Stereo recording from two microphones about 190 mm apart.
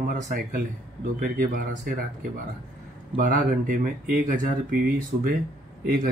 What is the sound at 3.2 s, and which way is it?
Speech, 45° right (ahead or behind).